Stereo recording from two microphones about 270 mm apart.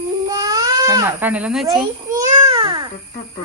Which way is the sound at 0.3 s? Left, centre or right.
Centre.